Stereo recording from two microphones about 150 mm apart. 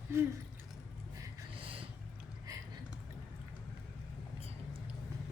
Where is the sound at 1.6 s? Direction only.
40° right (ahead or behind).